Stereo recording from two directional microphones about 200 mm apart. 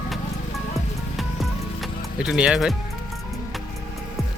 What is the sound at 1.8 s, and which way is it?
Music, 5° right (ahead or behind).